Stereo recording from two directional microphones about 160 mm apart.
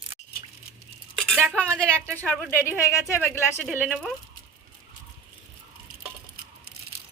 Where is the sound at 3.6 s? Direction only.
Centre (ahead or behind).